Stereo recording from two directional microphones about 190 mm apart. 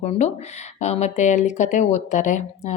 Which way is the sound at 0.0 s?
35° left (ahead or behind).